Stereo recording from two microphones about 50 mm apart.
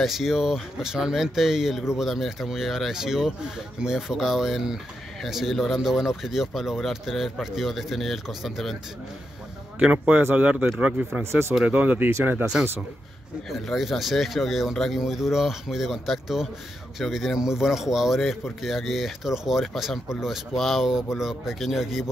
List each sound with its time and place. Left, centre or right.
0.0 s speech: centre
9.8 s speech: right
13.5 s speech: centre